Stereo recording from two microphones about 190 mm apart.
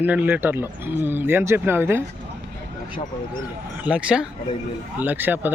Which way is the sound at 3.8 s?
5° right (ahead or behind).